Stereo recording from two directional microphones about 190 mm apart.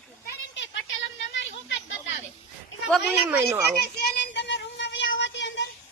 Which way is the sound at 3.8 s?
60° left (ahead or behind).